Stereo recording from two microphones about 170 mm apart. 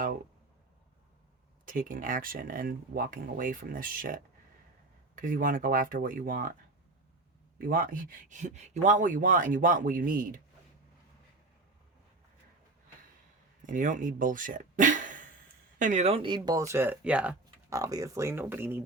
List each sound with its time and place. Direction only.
1.6 s speech: 50° right (ahead or behind)
7.6 s speech: 55° right (ahead or behind)
13.7 s speech: 50° right (ahead or behind); by 17.3 s 5° right (ahead or behind)
17.7 s speech: 20° right (ahead or behind)